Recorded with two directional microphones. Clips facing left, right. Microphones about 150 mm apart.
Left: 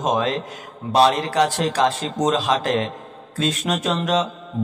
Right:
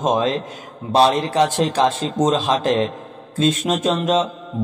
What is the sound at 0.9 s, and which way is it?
A man's voice, 25° right (ahead or behind).